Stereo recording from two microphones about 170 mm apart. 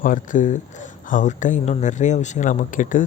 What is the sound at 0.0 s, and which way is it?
Speech, 50° left (ahead or behind).